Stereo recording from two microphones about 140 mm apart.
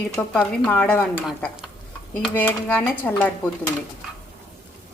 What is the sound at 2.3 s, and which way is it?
Speech, 15° left (ahead or behind).